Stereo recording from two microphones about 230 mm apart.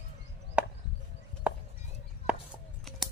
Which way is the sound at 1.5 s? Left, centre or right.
Centre.